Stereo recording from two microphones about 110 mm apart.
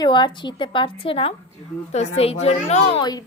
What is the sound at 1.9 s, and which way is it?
A woman's voice, 75° left (ahead or behind).